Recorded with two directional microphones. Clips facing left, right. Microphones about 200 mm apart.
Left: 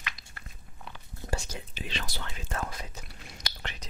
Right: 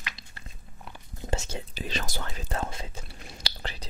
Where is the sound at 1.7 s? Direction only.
40° right (ahead or behind).